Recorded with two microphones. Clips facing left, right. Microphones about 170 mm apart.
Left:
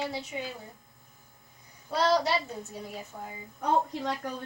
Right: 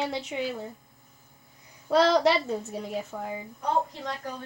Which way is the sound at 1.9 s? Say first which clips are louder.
Right 5 dB; 85° right.